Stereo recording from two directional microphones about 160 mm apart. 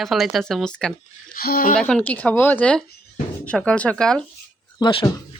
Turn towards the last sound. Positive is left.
turn(degrees=35)  # may be behind; listen again after turning